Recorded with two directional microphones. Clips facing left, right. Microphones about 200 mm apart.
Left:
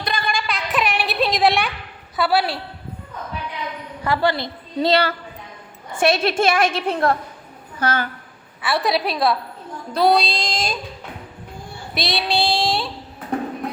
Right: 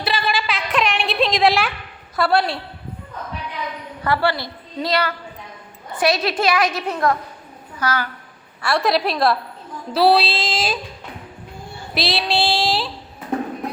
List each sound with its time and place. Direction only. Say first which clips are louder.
0.0 s a sound: right 2 dB; 5° right (ahead or behind)
2.1 s child singing: right 1 dB; 5° left (ahead or behind)
4.0 s a woman's voice: even; 15° left (ahead or behind)
8.6 s child singing: right 2 dB; centre (ahead or behind)
11.9 s child singing: right 1 dB; centre (ahead or behind)